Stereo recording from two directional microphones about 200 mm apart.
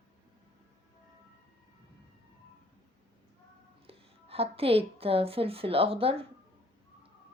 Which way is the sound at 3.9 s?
30° right (ahead or behind).